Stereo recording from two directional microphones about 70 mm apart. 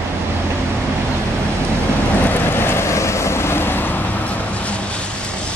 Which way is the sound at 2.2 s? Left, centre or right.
Left.